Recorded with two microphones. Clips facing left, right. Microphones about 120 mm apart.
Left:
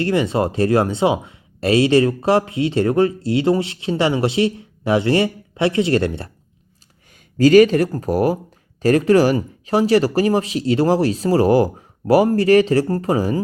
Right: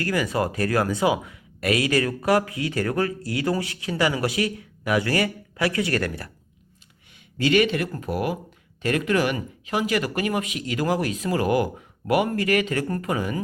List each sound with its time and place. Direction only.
0.0 s speech: 25° left (ahead or behind)
7.1 s speech: 40° left (ahead or behind)